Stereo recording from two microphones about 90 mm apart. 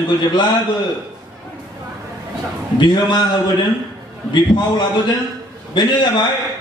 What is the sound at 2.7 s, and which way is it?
Speech, 55° left (ahead or behind).